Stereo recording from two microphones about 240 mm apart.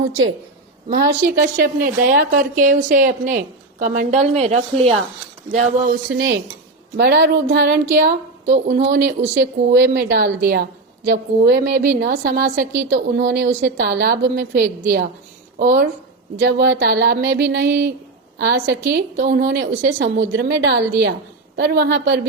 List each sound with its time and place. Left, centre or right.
0.9 s a woman's voice: right
5.5 s a woman's voice: right
8.5 s a woman's voice: right
8.8 s a woman's voice: right